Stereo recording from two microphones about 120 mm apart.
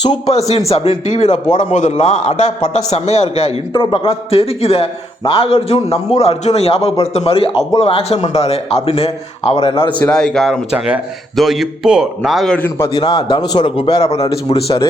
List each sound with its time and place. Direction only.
0.3 s a man's voice: 60° left (ahead or behind)
3.7 s a man's voice: 40° left (ahead or behind)
10.0 s a man's voice: 5° left (ahead or behind)
12.5 s a man's voice: 15° left (ahead or behind)
12.9 s a man's voice: 35° left (ahead or behind); by 14.8 s 50° left (ahead or behind)